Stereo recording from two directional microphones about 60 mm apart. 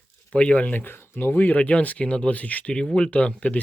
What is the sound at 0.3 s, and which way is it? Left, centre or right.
Speech, centre.